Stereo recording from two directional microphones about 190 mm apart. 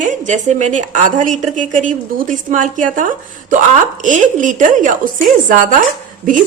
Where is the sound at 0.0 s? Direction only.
40° right (ahead or behind).